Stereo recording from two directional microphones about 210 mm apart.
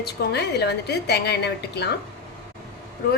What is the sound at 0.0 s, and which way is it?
A woman's voice, 50° left (ahead or behind).